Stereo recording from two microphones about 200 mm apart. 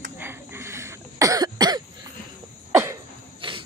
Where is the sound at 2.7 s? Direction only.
15° right (ahead or behind).